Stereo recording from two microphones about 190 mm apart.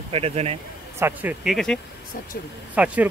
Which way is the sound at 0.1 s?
30° right (ahead or behind).